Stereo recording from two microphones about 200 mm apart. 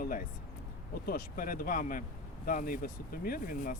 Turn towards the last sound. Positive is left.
turn(degrees=45)  # may be behind; listen again after turning